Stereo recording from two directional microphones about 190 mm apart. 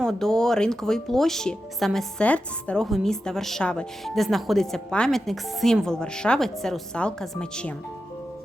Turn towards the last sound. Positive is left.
turn(degrees=5)  # may be behind; listen again after turning